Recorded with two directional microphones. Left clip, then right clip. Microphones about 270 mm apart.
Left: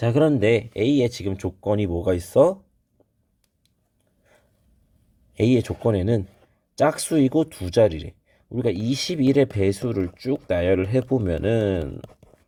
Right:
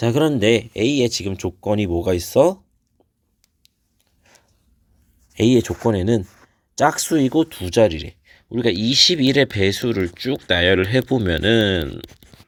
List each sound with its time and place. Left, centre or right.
0.0 s speech: right
5.4 s speech: right